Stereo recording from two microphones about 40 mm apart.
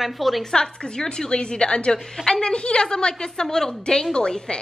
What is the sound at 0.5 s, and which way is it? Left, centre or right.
A woman's voice, centre.